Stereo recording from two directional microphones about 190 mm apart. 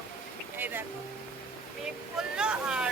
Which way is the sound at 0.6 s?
10° right (ahead or behind).